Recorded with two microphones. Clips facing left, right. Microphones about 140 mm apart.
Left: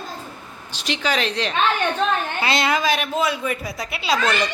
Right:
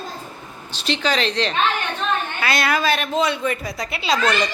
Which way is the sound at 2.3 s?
25° left (ahead or behind).